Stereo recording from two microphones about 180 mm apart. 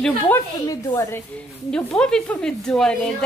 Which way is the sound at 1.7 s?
5° left (ahead or behind).